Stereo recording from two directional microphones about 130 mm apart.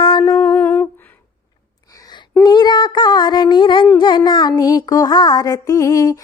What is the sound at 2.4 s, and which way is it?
Music, 35° left (ahead or behind).